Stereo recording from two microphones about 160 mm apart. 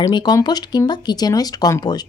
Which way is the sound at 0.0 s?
25° left (ahead or behind).